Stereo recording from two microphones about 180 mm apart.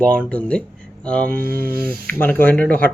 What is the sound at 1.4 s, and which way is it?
Speech, 55° right (ahead or behind).